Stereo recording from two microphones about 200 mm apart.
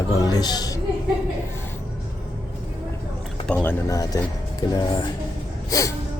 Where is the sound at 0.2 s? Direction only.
20° left (ahead or behind).